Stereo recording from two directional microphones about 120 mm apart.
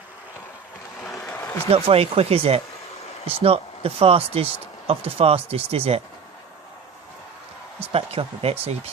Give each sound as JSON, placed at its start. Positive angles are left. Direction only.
{"t": 1.2, "sound": "a sound", "side_deg": 15}
{"t": 1.7, "sound": "speech", "side_deg": -55}
{"t": 7.9, "sound": "speech", "side_deg": -55}